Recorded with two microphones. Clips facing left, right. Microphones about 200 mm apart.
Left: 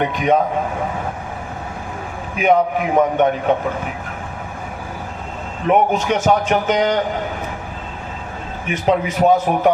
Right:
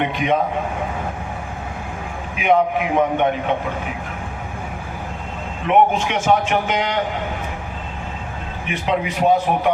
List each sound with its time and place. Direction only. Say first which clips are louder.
0.0 s a man's voice: left 3 dB; 45° left (ahead or behind)
2.4 s a man's voice: left 1 dB; 45° left (ahead or behind)
5.6 s a man's voice: left 1 dB; 40° left (ahead or behind)
8.6 s a man's voice: left 4 dB; 45° left (ahead or behind)